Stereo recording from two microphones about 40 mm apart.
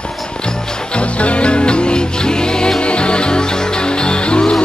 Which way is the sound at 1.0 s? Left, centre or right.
Left.